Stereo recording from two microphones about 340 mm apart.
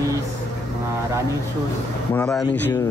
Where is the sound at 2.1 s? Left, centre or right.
Centre.